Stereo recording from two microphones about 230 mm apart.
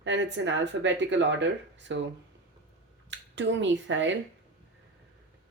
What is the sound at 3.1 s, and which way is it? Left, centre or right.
Speech, right.